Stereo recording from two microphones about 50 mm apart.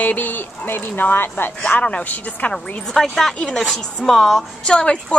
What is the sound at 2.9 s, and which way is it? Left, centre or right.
A woman's voice, centre.